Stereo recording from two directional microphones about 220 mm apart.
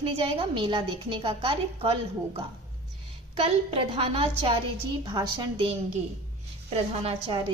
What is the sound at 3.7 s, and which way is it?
A woman's voice, 25° right (ahead or behind).